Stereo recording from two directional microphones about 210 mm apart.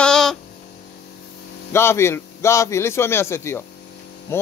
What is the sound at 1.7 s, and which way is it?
A man's voice, 10° left (ahead or behind).